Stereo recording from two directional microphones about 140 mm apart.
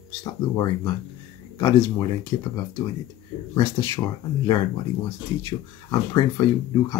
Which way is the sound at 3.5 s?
30° left (ahead or behind).